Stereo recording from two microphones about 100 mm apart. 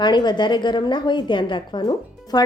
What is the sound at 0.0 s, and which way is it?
Speech, 50° left (ahead or behind).